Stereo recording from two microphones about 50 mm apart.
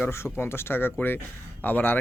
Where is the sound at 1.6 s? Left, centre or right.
Left.